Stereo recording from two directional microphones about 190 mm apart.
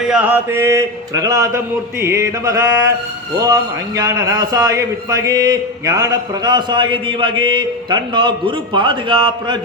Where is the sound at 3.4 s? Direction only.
20° right (ahead or behind).